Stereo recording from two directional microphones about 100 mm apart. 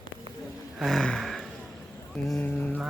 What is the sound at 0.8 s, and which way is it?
Gasp, 5° left (ahead or behind).